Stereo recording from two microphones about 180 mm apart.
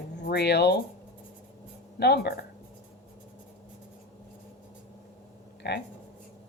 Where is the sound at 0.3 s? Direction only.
65° left (ahead or behind).